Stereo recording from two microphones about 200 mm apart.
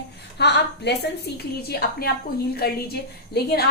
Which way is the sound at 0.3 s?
55° left (ahead or behind).